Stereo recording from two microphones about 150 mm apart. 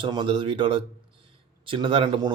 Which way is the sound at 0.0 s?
30° right (ahead or behind).